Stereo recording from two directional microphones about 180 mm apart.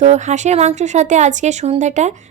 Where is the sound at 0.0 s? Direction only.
40° right (ahead or behind).